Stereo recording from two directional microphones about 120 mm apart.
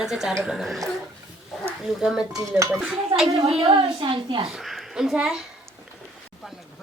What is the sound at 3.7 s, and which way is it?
Speech, 45° right (ahead or behind).